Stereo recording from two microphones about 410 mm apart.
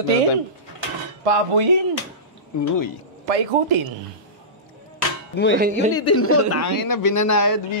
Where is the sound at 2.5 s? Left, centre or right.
Left.